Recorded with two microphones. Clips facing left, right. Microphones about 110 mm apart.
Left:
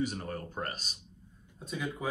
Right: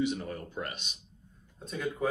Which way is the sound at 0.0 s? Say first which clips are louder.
Right 3 dB; 45° left (ahead or behind).